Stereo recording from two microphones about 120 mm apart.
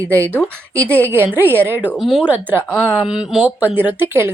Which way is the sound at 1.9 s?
Centre (ahead or behind).